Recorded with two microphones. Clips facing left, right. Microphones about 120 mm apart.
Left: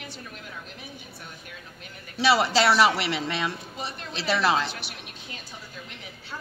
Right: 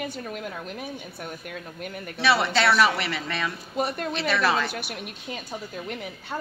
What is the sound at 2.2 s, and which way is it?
A woman's voice, 30° left (ahead or behind).